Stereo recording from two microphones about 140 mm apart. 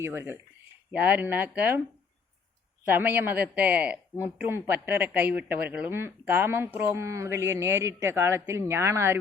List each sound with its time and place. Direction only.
0.0 s speech: 15° right (ahead or behind)
2.8 s speech: 15° right (ahead or behind)